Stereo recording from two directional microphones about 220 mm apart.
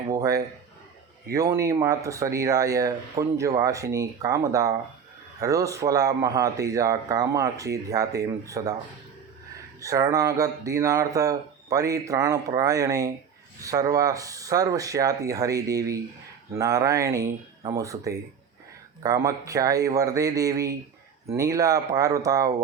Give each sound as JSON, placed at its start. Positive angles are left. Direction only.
{"t": 0.1, "sound": "speech", "side_deg": -15}
{"t": 9.8, "sound": "speech", "side_deg": -15}